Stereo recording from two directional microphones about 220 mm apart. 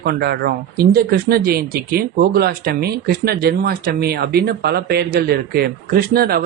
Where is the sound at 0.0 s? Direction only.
45° right (ahead or behind).